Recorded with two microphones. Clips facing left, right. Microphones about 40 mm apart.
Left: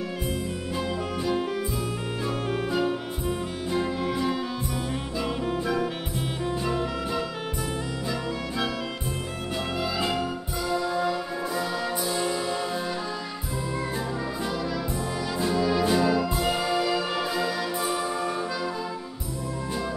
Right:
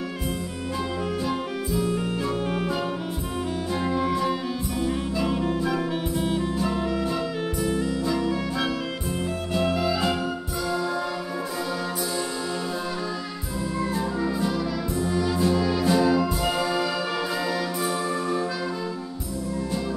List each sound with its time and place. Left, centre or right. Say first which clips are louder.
2.2 s music: right 2 dB; centre
5.2 s music: right 2 dB; centre
15.3 s music: left 2 dB; centre
15.9 s brass instrument: right 2 dB; centre